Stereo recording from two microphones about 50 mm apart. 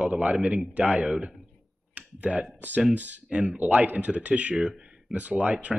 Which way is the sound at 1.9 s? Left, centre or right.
Right.